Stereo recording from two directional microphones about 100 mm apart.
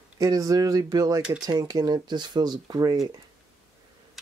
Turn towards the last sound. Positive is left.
turn(degrees=-40)  # may be behind; listen again after turning